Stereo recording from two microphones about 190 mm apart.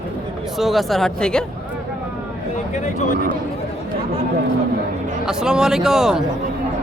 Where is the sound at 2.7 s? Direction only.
40° left (ahead or behind).